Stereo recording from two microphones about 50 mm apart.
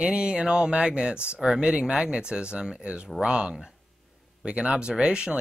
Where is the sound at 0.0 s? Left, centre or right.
Right.